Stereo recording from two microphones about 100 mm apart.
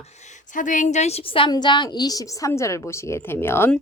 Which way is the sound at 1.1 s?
80° left.